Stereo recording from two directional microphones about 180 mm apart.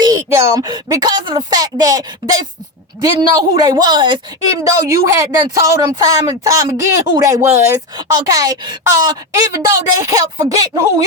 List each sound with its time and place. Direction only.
0.0 s speech: 20° right (ahead or behind)